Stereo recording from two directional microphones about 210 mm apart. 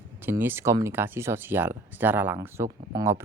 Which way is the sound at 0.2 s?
10° right (ahead or behind).